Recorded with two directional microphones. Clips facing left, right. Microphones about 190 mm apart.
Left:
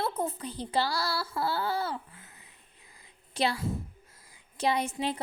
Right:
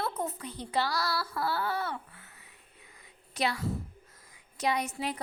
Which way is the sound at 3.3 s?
30° left (ahead or behind).